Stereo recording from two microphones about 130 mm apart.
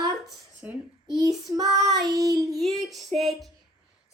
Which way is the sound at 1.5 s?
30° right (ahead or behind).